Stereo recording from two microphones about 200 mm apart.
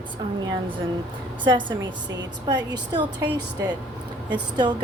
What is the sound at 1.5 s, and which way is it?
Speech, 25° right (ahead or behind).